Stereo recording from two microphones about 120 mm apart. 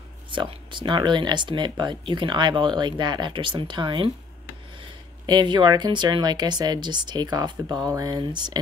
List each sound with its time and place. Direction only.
0.3 s speech: 40° right (ahead or behind)